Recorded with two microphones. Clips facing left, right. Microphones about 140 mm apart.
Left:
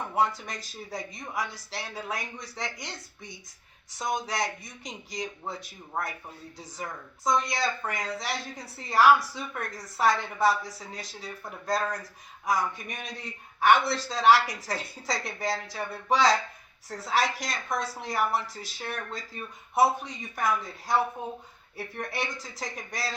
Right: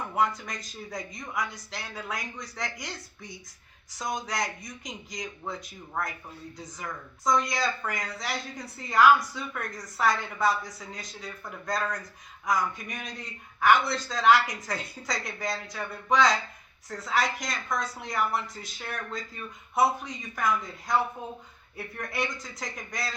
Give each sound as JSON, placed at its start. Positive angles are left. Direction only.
{"t": 0.2, "sound": "a woman's voice", "side_deg": 30}
{"t": 7.3, "sound": "a woman's voice", "side_deg": 25}